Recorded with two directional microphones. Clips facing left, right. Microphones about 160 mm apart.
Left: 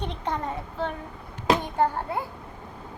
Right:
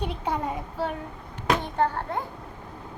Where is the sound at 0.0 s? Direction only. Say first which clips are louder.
Right 1 dB; 10° right (ahead or behind).